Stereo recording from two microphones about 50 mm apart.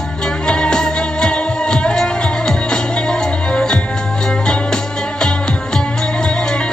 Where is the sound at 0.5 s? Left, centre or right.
Centre.